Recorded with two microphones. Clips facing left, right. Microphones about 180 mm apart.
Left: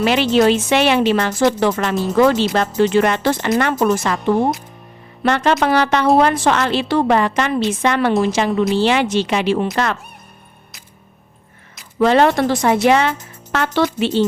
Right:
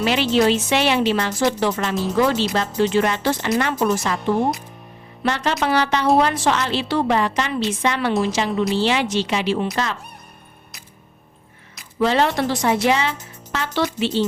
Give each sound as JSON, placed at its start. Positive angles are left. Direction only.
{"t": 0.0, "sound": "speech", "side_deg": 60}
{"t": 5.2, "sound": "a woman's voice", "side_deg": 55}
{"t": 11.9, "sound": "speech", "side_deg": 55}